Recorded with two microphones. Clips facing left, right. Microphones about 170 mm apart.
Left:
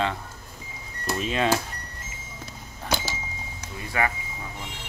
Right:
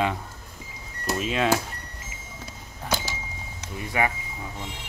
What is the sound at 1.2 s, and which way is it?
Speech, 5° right (ahead or behind).